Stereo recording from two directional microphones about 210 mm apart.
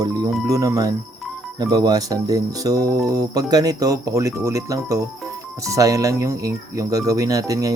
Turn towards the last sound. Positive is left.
turn(degrees=-15)  # may be behind; listen again after turning